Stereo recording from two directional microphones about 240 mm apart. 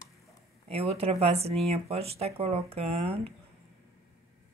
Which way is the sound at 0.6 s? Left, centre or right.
Right.